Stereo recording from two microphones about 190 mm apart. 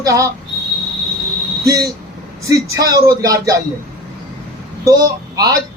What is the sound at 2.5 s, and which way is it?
A man's voice, 20° right (ahead or behind).